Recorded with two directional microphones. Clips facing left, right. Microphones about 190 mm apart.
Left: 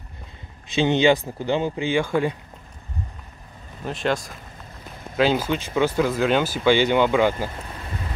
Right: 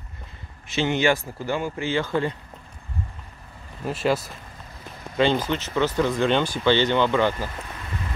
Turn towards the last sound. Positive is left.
turn(degrees=10)  # may be behind; listen again after turning